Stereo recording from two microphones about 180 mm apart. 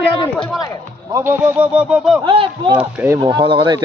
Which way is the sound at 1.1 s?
10° right (ahead or behind).